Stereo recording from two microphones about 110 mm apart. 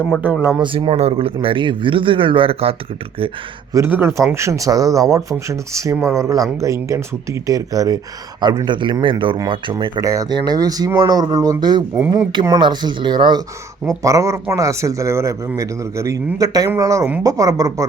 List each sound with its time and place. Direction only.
0.2 s speech: 15° right (ahead or behind)
0.6 s speech: 50° right (ahead or behind)
3.8 s speech: 20° right (ahead or behind); by 10.0 s 45° right (ahead or behind)
10.0 s speech: 30° right (ahead or behind)
13.8 s speech: 30° right (ahead or behind)